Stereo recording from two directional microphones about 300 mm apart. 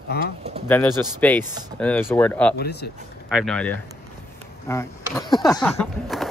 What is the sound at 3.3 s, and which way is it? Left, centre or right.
Speech, centre.